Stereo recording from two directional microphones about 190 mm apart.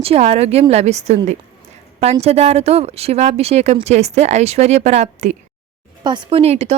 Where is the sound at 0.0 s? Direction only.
35° right (ahead or behind).